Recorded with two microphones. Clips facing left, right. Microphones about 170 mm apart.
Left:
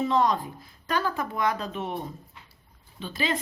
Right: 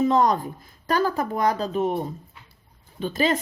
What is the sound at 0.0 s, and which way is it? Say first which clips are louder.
A woman's voice: right 4 dB; 45° right (ahead or behind).